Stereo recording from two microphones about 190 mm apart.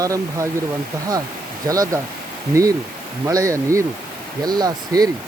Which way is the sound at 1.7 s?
20° right (ahead or behind).